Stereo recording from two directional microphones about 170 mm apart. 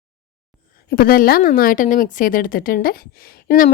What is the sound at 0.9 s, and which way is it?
A woman's voice, 60° left (ahead or behind).